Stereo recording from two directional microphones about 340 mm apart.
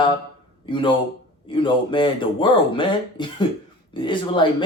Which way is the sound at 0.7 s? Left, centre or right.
Centre.